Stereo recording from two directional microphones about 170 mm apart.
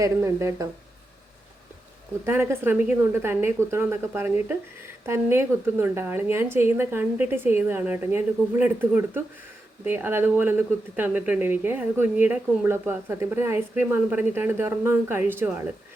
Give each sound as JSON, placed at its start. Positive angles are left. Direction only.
{"t": 0.0, "sound": "speech", "side_deg": -15}
{"t": 2.2, "sound": "speech", "side_deg": -15}